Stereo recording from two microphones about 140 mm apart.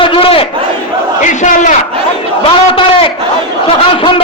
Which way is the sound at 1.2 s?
60° left (ahead or behind).